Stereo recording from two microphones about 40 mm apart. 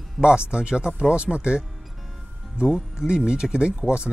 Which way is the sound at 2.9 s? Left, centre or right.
Right.